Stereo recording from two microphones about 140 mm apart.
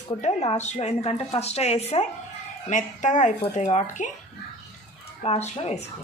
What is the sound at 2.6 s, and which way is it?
A woman's voice, 65° left (ahead or behind).